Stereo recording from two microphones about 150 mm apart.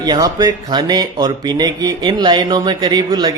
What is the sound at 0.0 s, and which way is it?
Speech, 30° right (ahead or behind).